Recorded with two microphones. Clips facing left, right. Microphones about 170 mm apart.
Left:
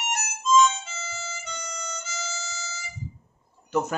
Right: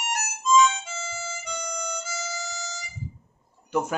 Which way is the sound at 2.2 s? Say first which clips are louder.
Right 2 dB; 15° right (ahead or behind).